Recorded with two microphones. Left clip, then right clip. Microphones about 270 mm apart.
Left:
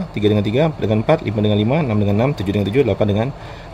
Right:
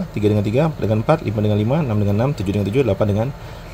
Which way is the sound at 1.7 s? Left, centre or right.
Right.